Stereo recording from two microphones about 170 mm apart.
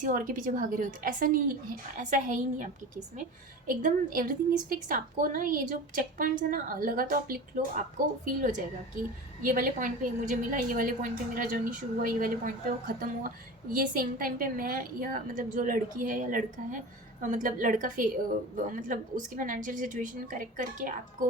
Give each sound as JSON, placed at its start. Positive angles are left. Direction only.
{"t": 0.0, "sound": "a woman's voice", "side_deg": -55}
{"t": 3.7, "sound": "a woman's voice", "side_deg": -50}
{"t": 7.6, "sound": "a woman's voice", "side_deg": -45}